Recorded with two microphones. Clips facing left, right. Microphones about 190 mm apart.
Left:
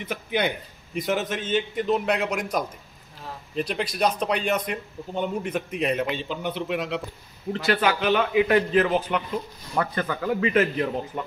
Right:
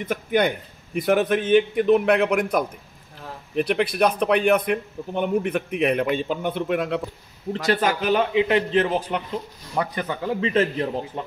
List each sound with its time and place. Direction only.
0.0 s speech: 50° right (ahead or behind)
7.5 s a man's voice: 40° right (ahead or behind)
8.3 s speech: 25° right (ahead or behind)
9.8 s speech: 20° right (ahead or behind)